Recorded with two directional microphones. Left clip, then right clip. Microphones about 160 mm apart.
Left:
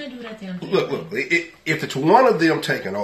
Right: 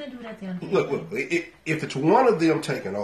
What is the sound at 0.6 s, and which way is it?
Speech, 10° left (ahead or behind).